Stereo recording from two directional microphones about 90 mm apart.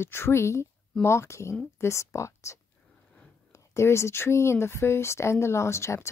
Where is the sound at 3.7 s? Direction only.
30° left (ahead or behind).